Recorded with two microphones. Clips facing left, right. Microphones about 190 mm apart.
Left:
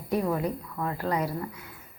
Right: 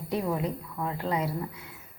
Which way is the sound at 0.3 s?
5° right (ahead or behind).